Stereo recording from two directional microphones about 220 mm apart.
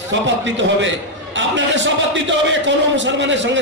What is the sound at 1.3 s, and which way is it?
Speech, 55° right (ahead or behind).